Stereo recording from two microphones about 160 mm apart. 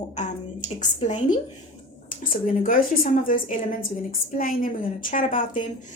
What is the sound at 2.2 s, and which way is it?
A woman's voice, 60° left (ahead or behind).